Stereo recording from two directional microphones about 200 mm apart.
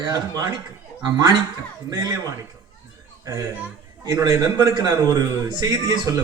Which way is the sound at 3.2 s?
15° right (ahead or behind).